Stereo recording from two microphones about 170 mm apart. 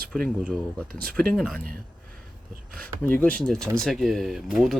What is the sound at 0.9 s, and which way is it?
Speech, 60° right (ahead or behind).